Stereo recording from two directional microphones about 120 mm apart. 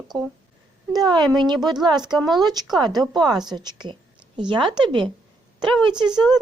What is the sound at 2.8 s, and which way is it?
A woman's voice, 35° right (ahead or behind).